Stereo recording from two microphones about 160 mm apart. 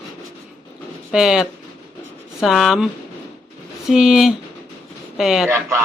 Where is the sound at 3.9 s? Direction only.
5° right (ahead or behind).